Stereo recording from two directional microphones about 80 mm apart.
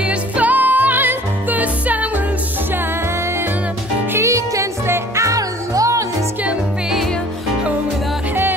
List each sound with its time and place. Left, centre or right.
0.0 s music: centre
4.1 s music: right